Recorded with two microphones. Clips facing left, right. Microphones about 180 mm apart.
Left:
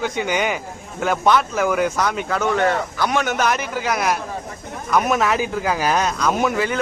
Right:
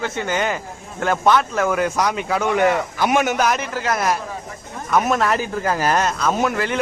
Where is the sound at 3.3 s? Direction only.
Centre (ahead or behind).